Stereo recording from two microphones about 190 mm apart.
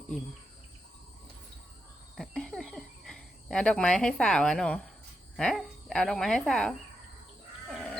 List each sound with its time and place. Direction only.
2.1 s a sound: 5° left (ahead or behind)
5.4 s speech: 5° left (ahead or behind)
7.7 s sheep: centre (ahead or behind)